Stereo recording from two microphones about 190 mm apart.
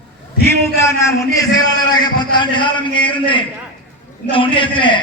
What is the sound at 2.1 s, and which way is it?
A man's voice, 25° left (ahead or behind).